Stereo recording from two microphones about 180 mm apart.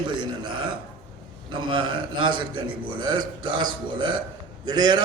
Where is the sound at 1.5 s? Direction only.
25° right (ahead or behind).